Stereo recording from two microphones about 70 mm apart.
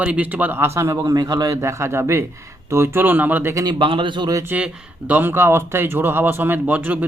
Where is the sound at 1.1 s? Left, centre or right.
Right.